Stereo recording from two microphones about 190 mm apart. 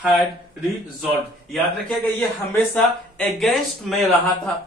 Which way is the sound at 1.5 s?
5° left (ahead or behind).